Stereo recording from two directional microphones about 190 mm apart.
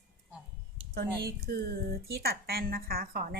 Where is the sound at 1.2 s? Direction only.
50° right (ahead or behind).